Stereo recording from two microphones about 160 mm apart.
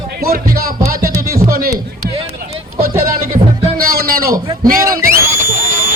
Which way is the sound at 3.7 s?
65° right (ahead or behind).